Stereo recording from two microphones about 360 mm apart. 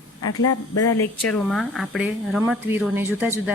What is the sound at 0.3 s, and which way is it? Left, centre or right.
Speech, left.